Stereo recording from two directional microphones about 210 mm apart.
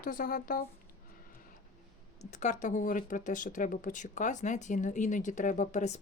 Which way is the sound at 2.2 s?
35° left (ahead or behind).